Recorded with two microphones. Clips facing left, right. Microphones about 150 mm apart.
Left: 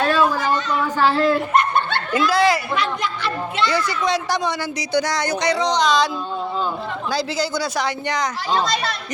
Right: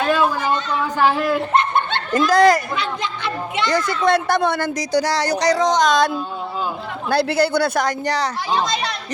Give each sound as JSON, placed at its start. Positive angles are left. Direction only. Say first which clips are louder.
{"t": 0.1, "sound": "a sound", "louder": "even", "side_deg": -15}
{"t": 1.5, "sound": "snicker", "louder": "even", "side_deg": -20}
{"t": 2.1, "sound": "speech", "louder": "right 4 dB", "side_deg": -45}
{"t": 2.7, "sound": "a child's voice", "louder": "left 2 dB", "side_deg": -25}
{"t": 3.7, "sound": "speech", "louder": "right 7 dB", "side_deg": -50}
{"t": 7.1, "sound": "speech", "louder": "right 6 dB", "side_deg": -60}